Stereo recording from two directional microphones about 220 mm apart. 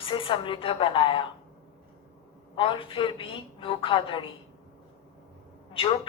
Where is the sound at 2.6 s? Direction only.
25° left (ahead or behind).